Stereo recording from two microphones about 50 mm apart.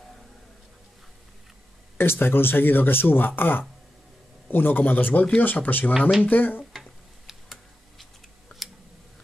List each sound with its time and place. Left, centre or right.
2.0 s speech: left
5.9 s speech: centre
6.2 s speech: left
6.7 s tick-tock: centre